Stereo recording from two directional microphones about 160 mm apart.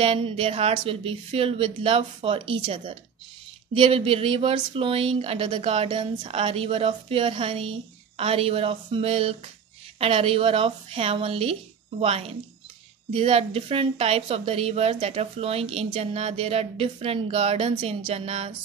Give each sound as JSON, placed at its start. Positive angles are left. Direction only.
{"t": 0.0, "sound": "a woman's voice", "side_deg": -35}